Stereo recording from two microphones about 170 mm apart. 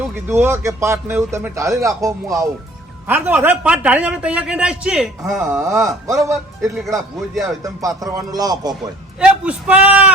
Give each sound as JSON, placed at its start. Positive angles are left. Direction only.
{"t": 0.3, "sound": "speech", "side_deg": -15}
{"t": 5.2, "sound": "speech", "side_deg": -15}
{"t": 6.3, "sound": "speech", "side_deg": 0}
{"t": 7.6, "sound": "speech", "side_deg": -20}
{"t": 9.2, "sound": "speech", "side_deg": -5}